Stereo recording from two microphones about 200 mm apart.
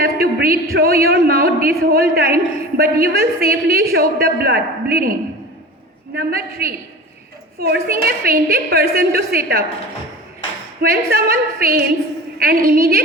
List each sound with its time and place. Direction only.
0.0 s a man's voice: 50° right (ahead or behind)
6.1 s a man's voice: 50° right (ahead or behind)
10.8 s a man's voice: 50° right (ahead or behind)